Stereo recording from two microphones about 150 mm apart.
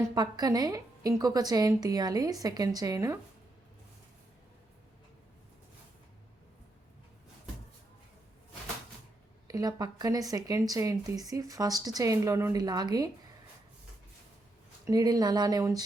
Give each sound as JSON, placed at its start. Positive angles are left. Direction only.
{"t": 0.1, "sound": "speech", "side_deg": -25}
{"t": 9.5, "sound": "speech", "side_deg": -25}
{"t": 14.8, "sound": "speech", "side_deg": -25}